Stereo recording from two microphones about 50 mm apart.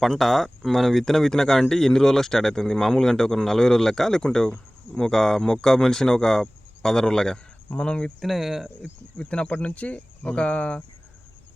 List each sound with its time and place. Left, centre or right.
0.0 s speech: centre
8.2 s speech: centre
9.1 s speech: left